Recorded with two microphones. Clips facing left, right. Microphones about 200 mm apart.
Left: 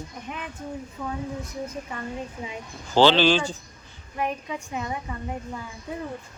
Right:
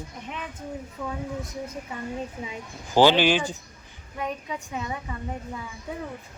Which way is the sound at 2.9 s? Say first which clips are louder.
Left 1 dB; 10° right (ahead or behind).